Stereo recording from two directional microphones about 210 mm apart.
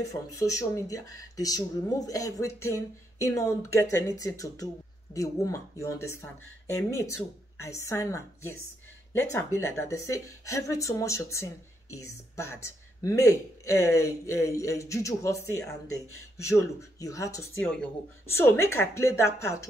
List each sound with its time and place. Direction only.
0.4 s speech: 15° left (ahead or behind)